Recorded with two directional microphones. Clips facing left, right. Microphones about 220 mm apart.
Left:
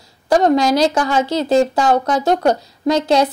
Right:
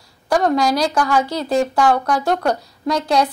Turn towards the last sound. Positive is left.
turn(degrees=25)  # may be behind; listen again after turning